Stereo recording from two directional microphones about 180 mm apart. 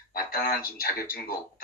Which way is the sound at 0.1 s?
55° left (ahead or behind).